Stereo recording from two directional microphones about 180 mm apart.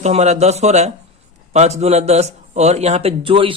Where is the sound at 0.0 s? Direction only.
40° right (ahead or behind).